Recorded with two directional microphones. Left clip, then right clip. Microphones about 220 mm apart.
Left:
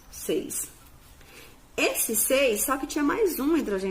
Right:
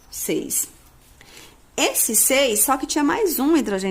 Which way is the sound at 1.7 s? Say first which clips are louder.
Right 5 dB; 50° right (ahead or behind).